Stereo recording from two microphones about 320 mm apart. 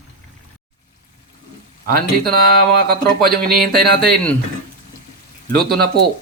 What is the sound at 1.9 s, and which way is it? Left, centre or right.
Speech, right.